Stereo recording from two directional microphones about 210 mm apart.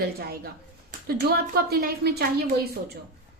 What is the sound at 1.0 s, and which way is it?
A woman's voice, 45° right (ahead or behind).